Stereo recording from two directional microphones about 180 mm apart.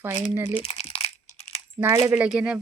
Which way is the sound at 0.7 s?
35° left (ahead or behind).